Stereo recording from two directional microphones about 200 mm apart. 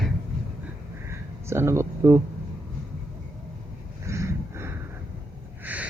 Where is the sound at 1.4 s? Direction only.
15° right (ahead or behind).